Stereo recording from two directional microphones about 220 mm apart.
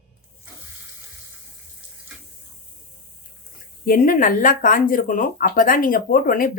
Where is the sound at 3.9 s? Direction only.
40° left (ahead or behind).